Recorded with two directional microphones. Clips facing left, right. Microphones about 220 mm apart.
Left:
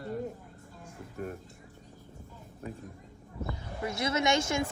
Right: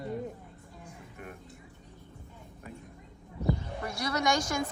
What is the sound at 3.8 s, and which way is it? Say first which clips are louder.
Speech: left 2 dB; 25° left (ahead or behind).